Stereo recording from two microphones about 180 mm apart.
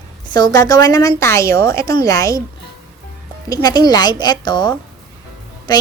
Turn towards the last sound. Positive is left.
turn(degrees=25)  # may be behind; listen again after turning